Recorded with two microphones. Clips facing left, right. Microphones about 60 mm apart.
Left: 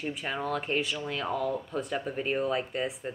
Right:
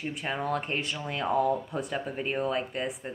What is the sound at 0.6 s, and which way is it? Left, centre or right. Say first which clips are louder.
Speech: left 2 dB; centre.